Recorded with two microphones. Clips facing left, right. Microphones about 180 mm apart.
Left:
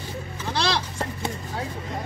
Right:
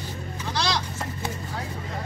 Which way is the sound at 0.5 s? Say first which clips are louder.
Left 2 dB; 30° left (ahead or behind).